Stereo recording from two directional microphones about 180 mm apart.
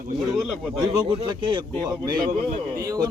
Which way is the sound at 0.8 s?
25° right (ahead or behind).